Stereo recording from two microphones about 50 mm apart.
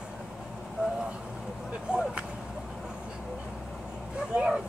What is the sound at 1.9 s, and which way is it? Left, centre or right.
Vehicle, centre.